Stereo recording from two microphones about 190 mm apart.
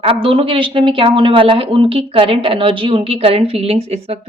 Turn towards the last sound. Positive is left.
turn(degrees=-30)  # may be behind; listen again after turning